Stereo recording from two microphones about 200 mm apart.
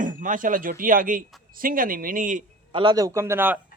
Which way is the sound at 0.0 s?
40° right (ahead or behind).